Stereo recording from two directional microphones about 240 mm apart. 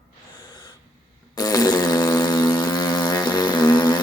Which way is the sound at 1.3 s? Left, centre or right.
Centre.